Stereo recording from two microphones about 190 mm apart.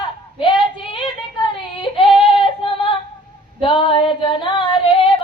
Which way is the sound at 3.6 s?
25° left (ahead or behind).